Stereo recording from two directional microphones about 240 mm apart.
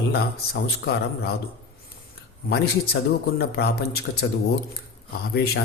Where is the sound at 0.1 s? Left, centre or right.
Left.